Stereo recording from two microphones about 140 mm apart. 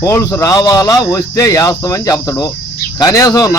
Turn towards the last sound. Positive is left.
turn(degrees=25)  # may be behind; listen again after turning